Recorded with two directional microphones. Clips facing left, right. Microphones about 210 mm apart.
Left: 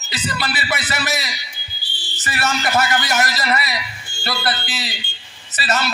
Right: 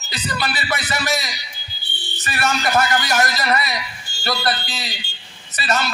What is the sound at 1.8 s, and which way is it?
Music, 60° right (ahead or behind).